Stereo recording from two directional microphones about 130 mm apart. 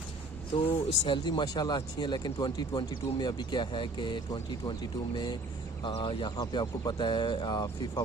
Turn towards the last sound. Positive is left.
turn(degrees=35)  # may be behind; listen again after turning